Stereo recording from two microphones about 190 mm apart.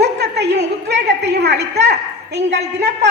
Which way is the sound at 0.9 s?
60° right (ahead or behind).